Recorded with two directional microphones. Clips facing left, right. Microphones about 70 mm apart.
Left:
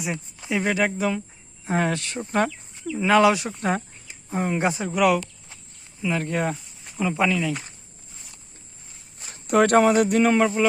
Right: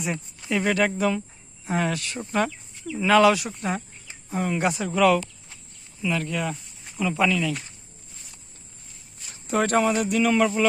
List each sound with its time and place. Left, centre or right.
0.0 s speech: centre
1.6 s speech: left
3.6 s speech: left
4.3 s speech: left
6.2 s speech: left
6.6 s snake: centre
7.0 s speech: left
9.3 s speech: left
10.3 s speech: left